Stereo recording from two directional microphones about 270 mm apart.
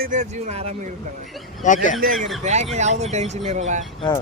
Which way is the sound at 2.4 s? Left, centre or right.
Right.